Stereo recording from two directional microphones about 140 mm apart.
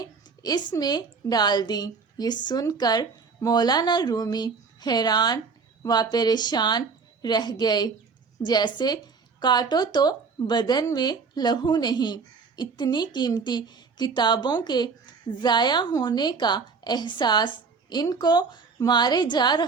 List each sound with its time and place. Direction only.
0.0 s a woman's voice: 30° left (ahead or behind)